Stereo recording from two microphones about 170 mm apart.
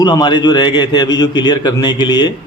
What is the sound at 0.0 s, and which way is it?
A man's voice, 25° left (ahead or behind).